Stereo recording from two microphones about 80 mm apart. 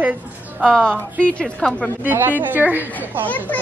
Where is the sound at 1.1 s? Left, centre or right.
Centre.